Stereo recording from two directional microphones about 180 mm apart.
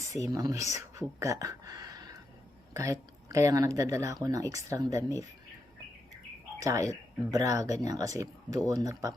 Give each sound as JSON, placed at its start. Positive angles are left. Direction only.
{"t": 0.1, "sound": "speech", "side_deg": -20}
{"t": 6.6, "sound": "speech", "side_deg": -15}